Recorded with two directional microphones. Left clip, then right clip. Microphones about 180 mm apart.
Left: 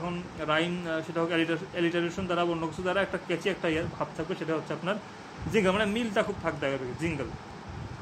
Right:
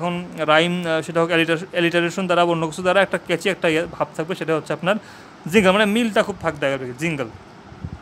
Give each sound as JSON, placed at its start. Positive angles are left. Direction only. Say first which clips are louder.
{"t": 0.0, "sound": "a man's voice", "louder": "right 11 dB", "side_deg": -50}